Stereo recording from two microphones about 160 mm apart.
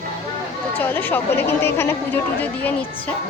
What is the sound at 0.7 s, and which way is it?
Speech, 10° left (ahead or behind).